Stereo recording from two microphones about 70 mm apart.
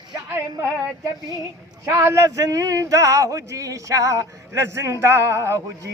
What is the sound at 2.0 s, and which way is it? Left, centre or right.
Speech, right.